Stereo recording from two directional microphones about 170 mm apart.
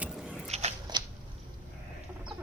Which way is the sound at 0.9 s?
25° right (ahead or behind).